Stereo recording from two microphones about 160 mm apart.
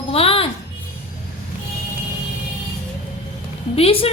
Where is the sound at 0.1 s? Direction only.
35° left (ahead or behind).